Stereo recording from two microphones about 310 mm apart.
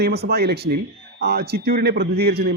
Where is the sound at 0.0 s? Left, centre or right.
Right.